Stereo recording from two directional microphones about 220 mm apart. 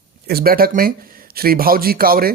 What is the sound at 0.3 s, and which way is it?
Speech, 45° right (ahead or behind).